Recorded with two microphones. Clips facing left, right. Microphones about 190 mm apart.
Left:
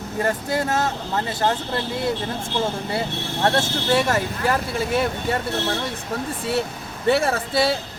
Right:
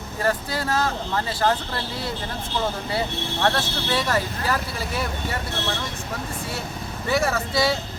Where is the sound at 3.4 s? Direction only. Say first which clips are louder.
Left 3 dB; 25° left (ahead or behind).